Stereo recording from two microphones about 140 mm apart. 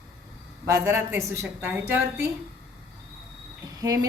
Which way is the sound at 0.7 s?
20° right (ahead or behind).